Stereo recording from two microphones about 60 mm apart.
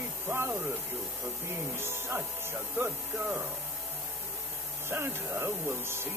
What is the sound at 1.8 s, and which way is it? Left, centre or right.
Speech, right.